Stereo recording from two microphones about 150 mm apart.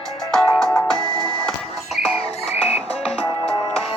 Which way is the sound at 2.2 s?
45° left (ahead or behind).